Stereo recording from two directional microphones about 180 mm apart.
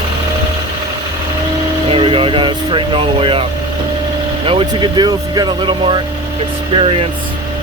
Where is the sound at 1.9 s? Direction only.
30° right (ahead or behind).